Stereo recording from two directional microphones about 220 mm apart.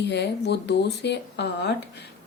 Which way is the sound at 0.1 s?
50° left (ahead or behind).